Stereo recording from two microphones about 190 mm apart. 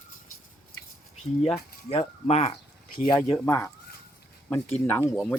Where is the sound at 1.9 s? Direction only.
30° left (ahead or behind).